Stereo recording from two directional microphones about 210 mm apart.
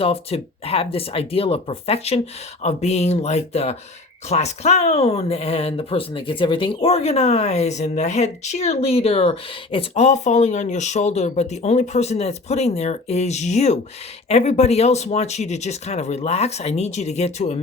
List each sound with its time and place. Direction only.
0.0 s speech: 25° left (ahead or behind)